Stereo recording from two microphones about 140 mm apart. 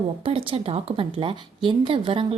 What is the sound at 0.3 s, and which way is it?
A woman's voice, 40° right (ahead or behind).